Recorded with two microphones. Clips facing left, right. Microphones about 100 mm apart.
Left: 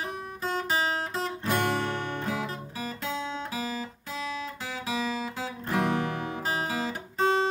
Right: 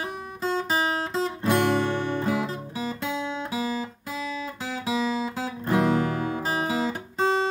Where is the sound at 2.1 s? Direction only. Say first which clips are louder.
Right 6 dB; 5° right (ahead or behind).